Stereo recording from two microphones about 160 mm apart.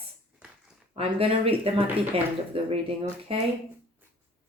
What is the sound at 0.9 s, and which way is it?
Speech, 35° right (ahead or behind).